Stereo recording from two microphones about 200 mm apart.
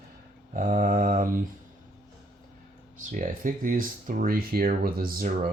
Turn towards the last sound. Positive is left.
turn(degrees=-45)  # may be behind; listen again after turning